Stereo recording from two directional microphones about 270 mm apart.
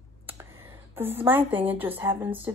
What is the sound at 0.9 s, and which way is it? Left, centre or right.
Speech, centre.